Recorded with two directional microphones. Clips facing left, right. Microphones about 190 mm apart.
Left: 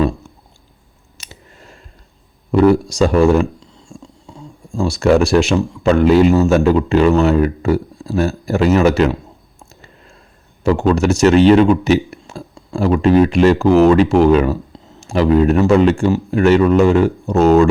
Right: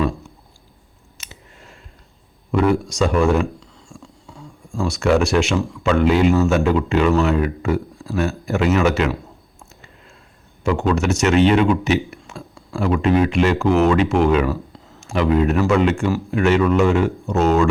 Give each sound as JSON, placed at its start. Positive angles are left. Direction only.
{"t": 1.2, "sound": "scissors", "side_deg": 40}
{"t": 2.5, "sound": "speech", "side_deg": 35}
{"t": 4.3, "sound": "speech", "side_deg": 25}
{"t": 10.6, "sound": "speech", "side_deg": 35}